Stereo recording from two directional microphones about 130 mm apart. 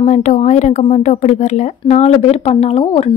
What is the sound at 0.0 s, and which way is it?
Speech, 65° left (ahead or behind).